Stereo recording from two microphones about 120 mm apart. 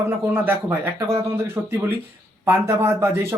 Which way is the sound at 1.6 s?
10° right (ahead or behind).